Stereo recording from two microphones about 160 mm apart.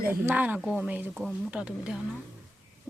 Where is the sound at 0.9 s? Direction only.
10° right (ahead or behind).